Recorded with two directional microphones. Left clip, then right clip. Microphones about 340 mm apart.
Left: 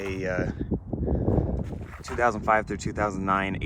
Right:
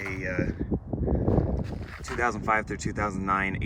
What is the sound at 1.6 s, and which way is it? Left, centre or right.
Speech, centre.